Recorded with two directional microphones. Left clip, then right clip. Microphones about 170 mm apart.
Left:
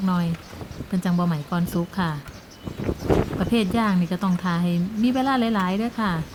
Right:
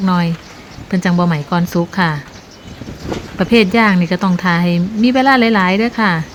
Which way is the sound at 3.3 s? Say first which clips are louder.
Right 12 dB; 15° right (ahead or behind).